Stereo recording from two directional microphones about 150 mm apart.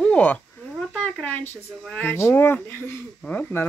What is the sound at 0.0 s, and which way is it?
Speech, 10° left (ahead or behind).